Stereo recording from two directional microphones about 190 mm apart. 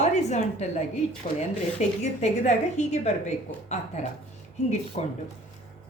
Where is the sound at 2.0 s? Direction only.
40° left (ahead or behind).